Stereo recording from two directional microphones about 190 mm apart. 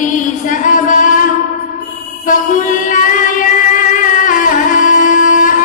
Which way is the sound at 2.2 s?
45° left (ahead or behind).